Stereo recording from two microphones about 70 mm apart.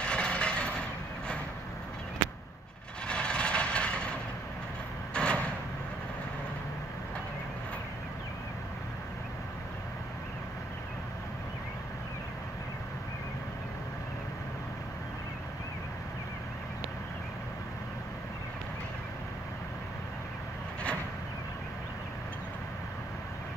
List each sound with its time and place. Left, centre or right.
0.0 s mechanisms: centre
3.1 s vehicle: centre
5.1 s a sound: centre